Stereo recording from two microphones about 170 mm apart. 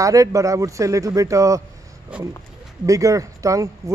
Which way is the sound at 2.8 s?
20° right (ahead or behind).